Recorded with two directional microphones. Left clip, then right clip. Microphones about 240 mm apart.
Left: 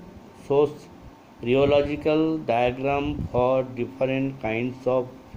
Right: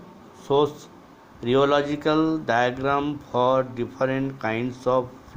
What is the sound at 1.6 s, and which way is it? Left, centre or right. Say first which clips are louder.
Speech: left 3 dB; right.